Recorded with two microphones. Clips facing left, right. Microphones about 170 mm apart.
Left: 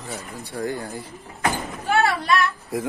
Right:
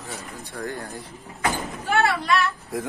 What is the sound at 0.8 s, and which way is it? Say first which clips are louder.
Speech: left 3 dB; centre (ahead or behind).